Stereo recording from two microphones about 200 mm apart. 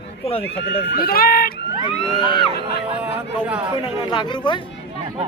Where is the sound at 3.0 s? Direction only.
5° right (ahead or behind).